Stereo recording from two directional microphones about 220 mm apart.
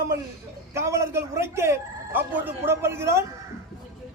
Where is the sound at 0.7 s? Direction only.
10° right (ahead or behind).